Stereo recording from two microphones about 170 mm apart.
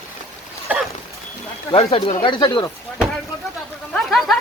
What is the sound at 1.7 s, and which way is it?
Speech, 35° left (ahead or behind).